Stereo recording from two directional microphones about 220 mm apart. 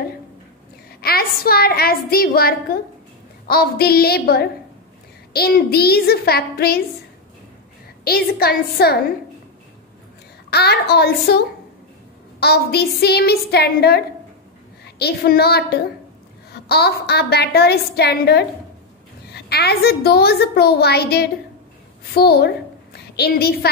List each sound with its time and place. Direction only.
1.0 s a woman's voice: 45° left (ahead or behind)
8.0 s a woman's voice: 45° left (ahead or behind)
10.5 s a woman's voice: 45° left (ahead or behind)